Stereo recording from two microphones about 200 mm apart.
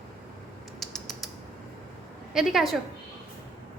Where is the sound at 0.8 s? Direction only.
Centre (ahead or behind).